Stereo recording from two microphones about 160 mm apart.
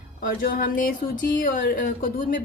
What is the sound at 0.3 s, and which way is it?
A woman's voice, 65° left (ahead or behind).